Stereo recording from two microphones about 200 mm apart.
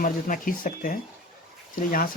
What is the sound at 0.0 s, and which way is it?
Speech, 45° left (ahead or behind).